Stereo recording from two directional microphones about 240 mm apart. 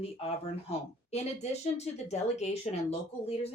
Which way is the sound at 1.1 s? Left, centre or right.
Left.